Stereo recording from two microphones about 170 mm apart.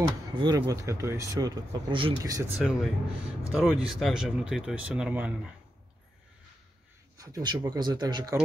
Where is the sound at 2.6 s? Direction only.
Centre (ahead or behind).